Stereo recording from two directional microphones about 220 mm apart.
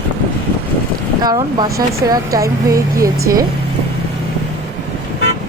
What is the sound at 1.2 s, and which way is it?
A woman's voice, 20° right (ahead or behind).